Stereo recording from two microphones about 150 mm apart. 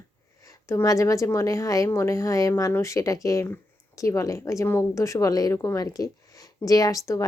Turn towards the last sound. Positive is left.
turn(degrees=20)  # may be behind; listen again after turning